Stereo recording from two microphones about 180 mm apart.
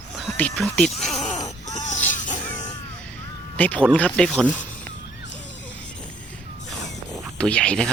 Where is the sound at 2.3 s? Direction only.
10° left (ahead or behind).